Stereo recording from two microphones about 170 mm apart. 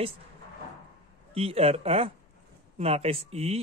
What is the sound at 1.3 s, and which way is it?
Speech, 35° right (ahead or behind).